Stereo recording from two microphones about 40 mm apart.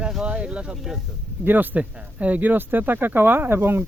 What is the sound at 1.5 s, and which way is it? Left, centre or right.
Speech, right.